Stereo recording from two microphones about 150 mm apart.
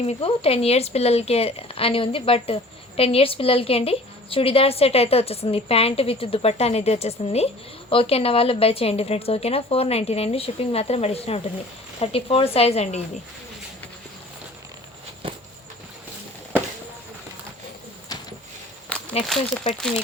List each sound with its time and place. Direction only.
0.0 s speech: 40° left (ahead or behind)
18.1 s a sound: 25° left (ahead or behind)
18.9 s walk: 10° left (ahead or behind)
19.6 s speech: 30° left (ahead or behind)